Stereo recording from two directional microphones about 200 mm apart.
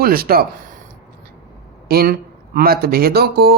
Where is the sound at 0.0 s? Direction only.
50° right (ahead or behind).